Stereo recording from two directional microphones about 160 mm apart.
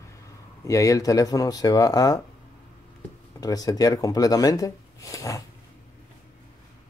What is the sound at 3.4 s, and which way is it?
Speech, 25° left (ahead or behind).